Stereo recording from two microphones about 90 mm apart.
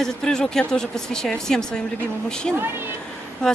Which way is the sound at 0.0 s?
5° left (ahead or behind).